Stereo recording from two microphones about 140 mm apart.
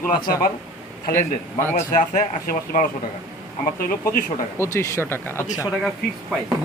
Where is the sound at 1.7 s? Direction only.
60° left (ahead or behind).